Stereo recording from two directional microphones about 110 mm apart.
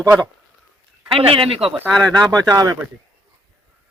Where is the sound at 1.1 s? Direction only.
55° right (ahead or behind).